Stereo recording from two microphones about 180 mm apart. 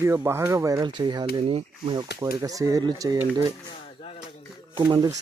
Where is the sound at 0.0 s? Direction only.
15° right (ahead or behind).